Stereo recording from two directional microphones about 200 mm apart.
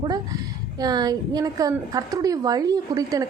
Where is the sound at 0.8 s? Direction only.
20° right (ahead or behind).